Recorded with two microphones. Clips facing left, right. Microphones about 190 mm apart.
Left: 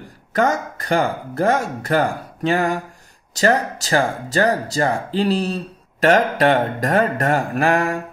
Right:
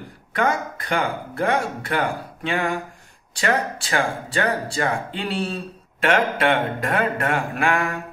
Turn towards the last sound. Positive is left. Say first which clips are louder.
# left 4 dB
turn(degrees=40)  # may be behind; listen again after turning